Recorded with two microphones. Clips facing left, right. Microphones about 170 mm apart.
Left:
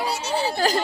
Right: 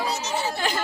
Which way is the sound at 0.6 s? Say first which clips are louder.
Left 7 dB; 40° left (ahead or behind).